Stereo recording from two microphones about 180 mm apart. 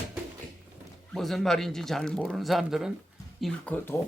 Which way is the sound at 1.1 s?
Centre (ahead or behind).